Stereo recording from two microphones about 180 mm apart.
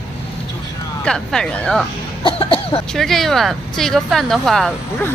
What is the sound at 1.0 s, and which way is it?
Speech, 5° left (ahead or behind).